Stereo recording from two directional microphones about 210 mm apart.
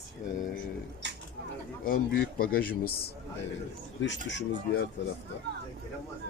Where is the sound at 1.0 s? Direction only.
55° right (ahead or behind).